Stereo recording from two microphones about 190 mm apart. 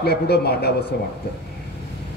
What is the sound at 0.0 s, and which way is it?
Speech, 55° left (ahead or behind).